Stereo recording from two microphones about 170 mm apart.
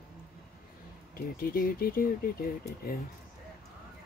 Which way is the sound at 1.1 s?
60° left (ahead or behind).